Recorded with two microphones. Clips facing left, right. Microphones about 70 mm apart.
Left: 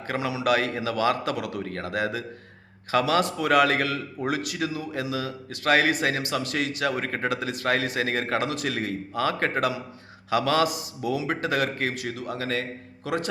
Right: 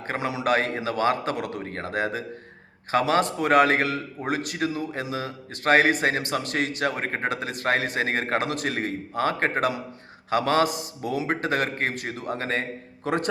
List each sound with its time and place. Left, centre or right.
0.1 s a man's voice: right